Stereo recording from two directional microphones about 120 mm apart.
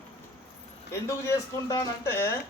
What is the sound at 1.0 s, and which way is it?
Speech, 25° left (ahead or behind).